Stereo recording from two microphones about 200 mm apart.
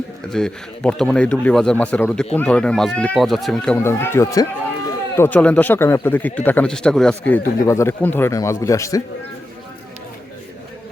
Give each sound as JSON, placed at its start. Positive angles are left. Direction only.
{"t": 0.3, "sound": "speech", "side_deg": 5}
{"t": 3.8, "sound": "a man's voice", "side_deg": 10}